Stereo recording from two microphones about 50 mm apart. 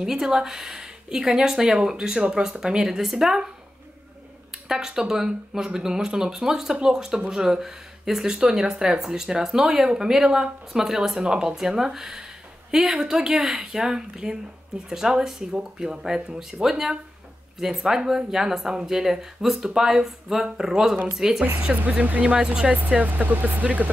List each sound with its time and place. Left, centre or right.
0.0 s speech: centre
4.5 s speech: centre
21.5 s speech: right
22.2 s speech: centre